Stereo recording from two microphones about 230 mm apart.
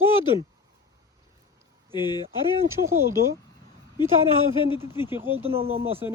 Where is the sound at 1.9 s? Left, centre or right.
Centre.